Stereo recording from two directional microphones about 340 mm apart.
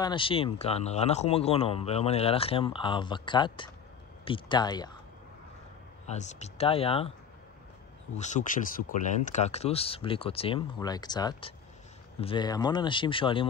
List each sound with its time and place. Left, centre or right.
0.0 s speech: centre
6.0 s speech: centre
8.1 s speech: left